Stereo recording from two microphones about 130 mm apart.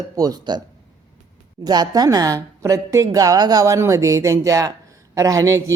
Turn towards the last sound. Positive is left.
turn(degrees=-25)  # may be behind; listen again after turning